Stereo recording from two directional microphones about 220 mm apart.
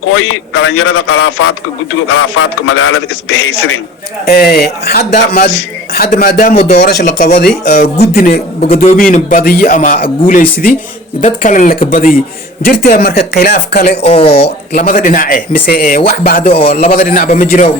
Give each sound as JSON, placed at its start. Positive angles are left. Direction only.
{"t": 0.0, "sound": "speech", "side_deg": 70}
{"t": 4.3, "sound": "a man's voice", "side_deg": 45}
{"t": 13.9, "sound": "speech", "side_deg": 25}
{"t": 14.7, "sound": "a man's voice", "side_deg": 40}
{"t": 16.4, "sound": "speech", "side_deg": 25}
{"t": 16.9, "sound": "a man's voice", "side_deg": 40}